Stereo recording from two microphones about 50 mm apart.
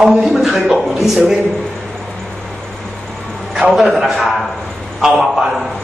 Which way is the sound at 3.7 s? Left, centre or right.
Centre.